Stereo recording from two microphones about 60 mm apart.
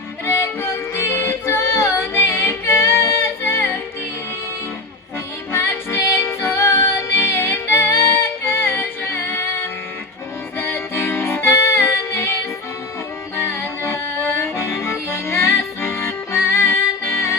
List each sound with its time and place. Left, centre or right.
0.3 s music: left
5.5 s music: left